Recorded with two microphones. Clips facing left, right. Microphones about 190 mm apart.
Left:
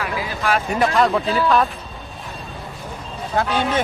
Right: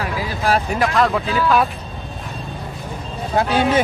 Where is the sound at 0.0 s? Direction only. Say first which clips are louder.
Right 2 dB; 40° right (ahead or behind).